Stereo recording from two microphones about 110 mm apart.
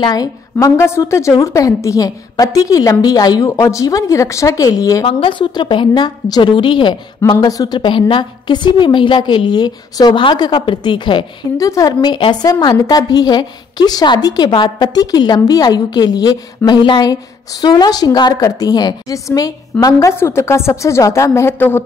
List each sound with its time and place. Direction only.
0.0 s a woman's voice: 35° left (ahead or behind)
5.0 s a woman's voice: 50° left (ahead or behind)
7.4 s a woman's voice: 35° left (ahead or behind)
11.5 s a woman's voice: 30° left (ahead or behind)